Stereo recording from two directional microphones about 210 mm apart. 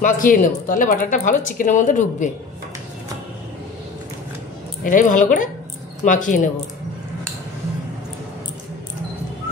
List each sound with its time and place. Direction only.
0.0 s speech: 40° left (ahead or behind)
4.8 s speech: 40° left (ahead or behind)